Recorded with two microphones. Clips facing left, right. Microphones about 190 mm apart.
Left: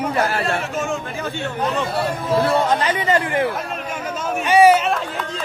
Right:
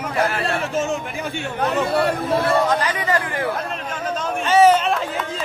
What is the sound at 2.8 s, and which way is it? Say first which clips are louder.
Speech: left 3 dB; 25° left (ahead or behind).